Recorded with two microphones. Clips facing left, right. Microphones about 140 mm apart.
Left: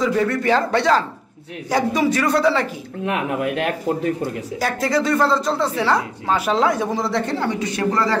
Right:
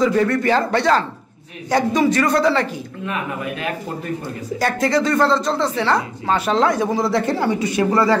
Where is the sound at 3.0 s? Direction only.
70° left (ahead or behind).